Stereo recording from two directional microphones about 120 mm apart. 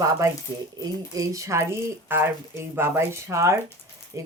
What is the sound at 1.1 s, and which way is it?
Speech, 30° right (ahead or behind).